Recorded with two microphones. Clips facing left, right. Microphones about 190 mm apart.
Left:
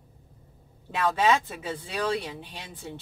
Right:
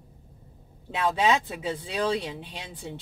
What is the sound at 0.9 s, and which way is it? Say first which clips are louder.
Speech: even; 20° right (ahead or behind).